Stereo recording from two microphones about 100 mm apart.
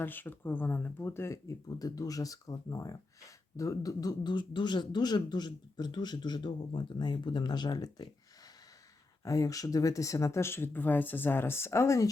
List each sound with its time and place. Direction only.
0.0 s speech: 20° left (ahead or behind); by 8.1 s 40° left (ahead or behind)
9.2 s speech: 35° left (ahead or behind)